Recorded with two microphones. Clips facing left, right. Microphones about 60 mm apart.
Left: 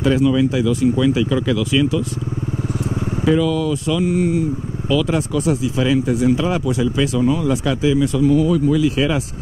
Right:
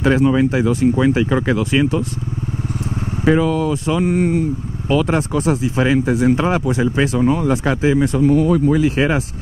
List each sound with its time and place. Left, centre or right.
0.0 s speech: right
3.3 s speech: right